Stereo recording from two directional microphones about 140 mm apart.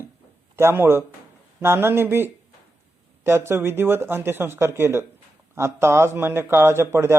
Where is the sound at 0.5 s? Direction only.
15° right (ahead or behind).